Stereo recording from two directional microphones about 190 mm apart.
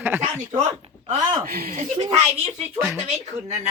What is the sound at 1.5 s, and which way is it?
Speech, 50° right (ahead or behind).